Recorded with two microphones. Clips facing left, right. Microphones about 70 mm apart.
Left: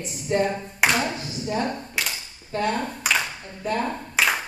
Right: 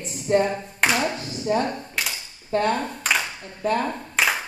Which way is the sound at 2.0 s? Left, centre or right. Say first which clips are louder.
Even; centre.